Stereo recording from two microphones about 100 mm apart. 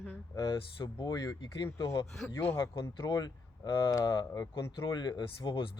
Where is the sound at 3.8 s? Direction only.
35° left (ahead or behind).